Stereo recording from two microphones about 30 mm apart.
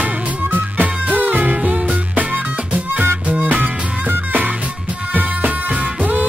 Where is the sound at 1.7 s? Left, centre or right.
Right.